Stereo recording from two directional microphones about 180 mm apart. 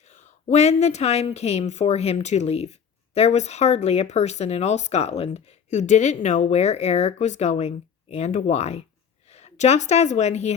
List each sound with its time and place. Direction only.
0.1 s a woman's voice: 40° left (ahead or behind)